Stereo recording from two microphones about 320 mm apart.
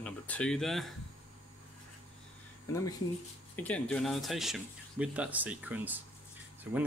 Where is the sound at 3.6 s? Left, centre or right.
Centre.